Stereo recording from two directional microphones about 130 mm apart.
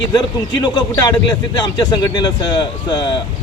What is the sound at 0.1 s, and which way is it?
A man's voice, 30° left (ahead or behind).